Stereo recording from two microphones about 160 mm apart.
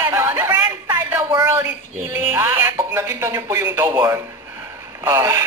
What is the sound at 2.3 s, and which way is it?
Speech, 15° right (ahead or behind).